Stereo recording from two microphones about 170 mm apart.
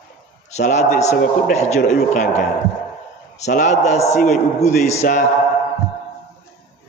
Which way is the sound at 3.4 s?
45° left (ahead or behind).